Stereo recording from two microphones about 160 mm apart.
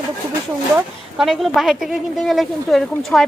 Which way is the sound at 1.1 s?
Centre (ahead or behind).